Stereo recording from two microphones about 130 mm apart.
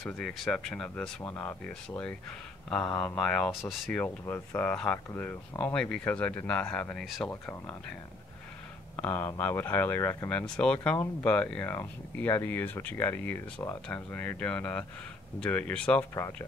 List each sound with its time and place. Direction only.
0.0 s speech: centre (ahead or behind)
4.0 s speech: 15° left (ahead or behind)
7.2 s speech: 15° left (ahead or behind)
8.9 s speech: 15° left (ahead or behind)
10.4 s speech: 5° left (ahead or behind)